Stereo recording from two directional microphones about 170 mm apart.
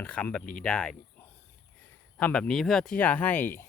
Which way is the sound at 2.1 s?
5° left (ahead or behind).